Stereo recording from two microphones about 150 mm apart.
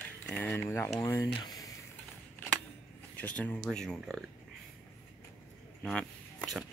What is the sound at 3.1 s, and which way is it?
Speech, 10° left (ahead or behind).